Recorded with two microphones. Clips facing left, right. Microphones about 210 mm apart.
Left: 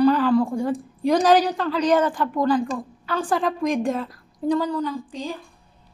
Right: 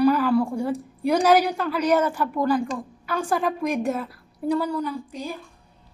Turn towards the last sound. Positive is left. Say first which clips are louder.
# left 2 dB
turn(degrees=-10)  # may be behind; listen again after turning